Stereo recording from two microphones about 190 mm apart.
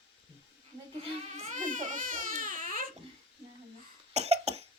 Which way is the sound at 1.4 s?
40° right (ahead or behind).